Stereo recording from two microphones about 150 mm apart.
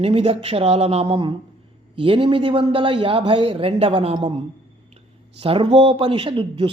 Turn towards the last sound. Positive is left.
turn(degrees=-35)  # may be behind; listen again after turning